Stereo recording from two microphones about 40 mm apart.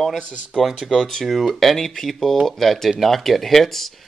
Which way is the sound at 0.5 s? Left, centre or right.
Centre.